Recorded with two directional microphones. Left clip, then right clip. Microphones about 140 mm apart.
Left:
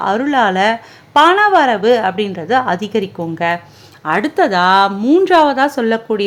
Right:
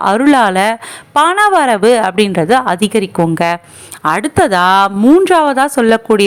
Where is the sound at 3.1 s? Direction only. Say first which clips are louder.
Right 5 dB; 40° right (ahead or behind).